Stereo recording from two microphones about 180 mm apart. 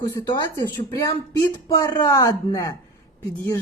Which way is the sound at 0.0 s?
20° left (ahead or behind).